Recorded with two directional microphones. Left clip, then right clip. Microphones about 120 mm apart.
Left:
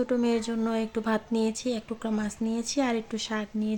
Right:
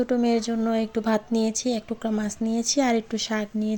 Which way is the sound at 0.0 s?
20° right (ahead or behind).